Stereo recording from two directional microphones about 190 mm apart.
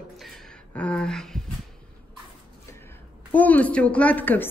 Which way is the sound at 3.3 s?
10° left (ahead or behind).